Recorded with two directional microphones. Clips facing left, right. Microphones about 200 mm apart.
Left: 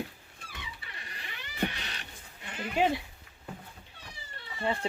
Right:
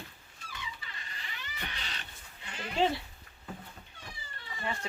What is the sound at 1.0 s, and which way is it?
Vehicle, 60° left (ahead or behind).